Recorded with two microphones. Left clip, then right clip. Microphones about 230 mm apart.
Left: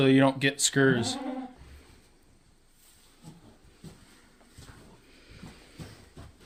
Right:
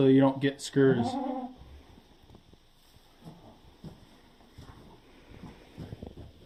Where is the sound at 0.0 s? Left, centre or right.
Left.